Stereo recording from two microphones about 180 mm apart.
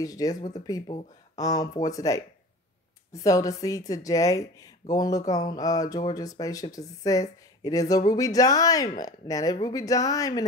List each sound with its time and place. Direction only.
0.0 s speech: 20° left (ahead or behind)